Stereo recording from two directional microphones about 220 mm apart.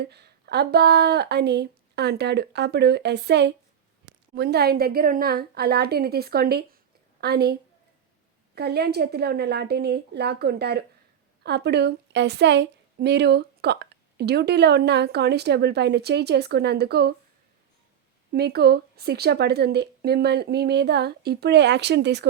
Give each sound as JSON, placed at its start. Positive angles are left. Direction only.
{"t": 0.0, "sound": "a woman's voice", "side_deg": -50}
{"t": 18.3, "sound": "a woman's voice", "side_deg": -45}